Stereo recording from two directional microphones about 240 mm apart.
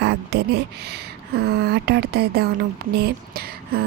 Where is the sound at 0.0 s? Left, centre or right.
Right.